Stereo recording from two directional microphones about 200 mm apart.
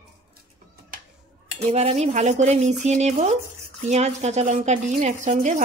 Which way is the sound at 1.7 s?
35° right (ahead or behind).